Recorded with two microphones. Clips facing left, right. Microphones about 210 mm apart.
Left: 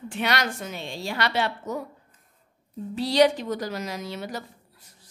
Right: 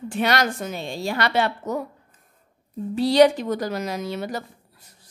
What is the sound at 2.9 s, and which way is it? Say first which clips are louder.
A woman's voice: right 4 dB; 55° right (ahead or behind).